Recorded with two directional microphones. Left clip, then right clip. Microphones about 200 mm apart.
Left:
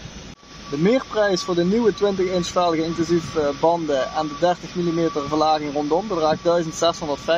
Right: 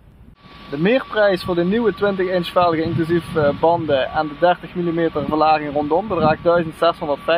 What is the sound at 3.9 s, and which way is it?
Speech, 10° left (ahead or behind).